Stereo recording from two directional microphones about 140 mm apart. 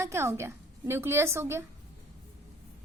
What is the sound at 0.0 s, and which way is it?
A woman's voice, 20° right (ahead or behind).